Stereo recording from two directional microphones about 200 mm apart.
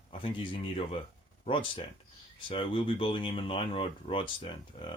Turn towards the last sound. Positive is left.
turn(degrees=25)  # may be behind; listen again after turning